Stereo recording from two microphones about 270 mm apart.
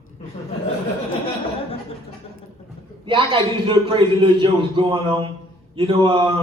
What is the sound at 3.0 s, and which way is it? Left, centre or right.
A man's voice, centre.